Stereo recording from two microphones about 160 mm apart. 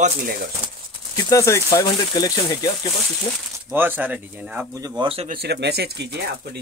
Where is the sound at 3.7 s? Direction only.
15° right (ahead or behind).